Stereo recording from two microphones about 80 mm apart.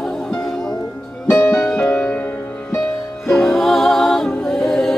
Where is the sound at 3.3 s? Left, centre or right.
Centre.